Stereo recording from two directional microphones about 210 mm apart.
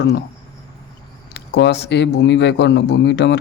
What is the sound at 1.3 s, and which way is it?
Speech, 55° left (ahead or behind).